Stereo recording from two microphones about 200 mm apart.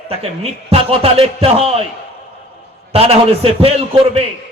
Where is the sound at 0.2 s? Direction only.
30° right (ahead or behind).